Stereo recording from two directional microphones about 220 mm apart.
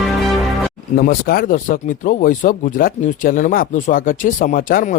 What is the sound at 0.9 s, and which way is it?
A man's voice, 40° left (ahead or behind).